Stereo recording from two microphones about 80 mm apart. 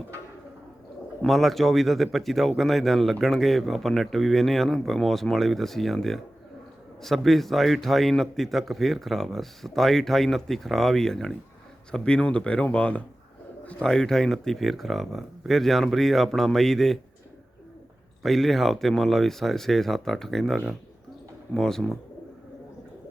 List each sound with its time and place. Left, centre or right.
1.3 s speech: centre
18.2 s speech: centre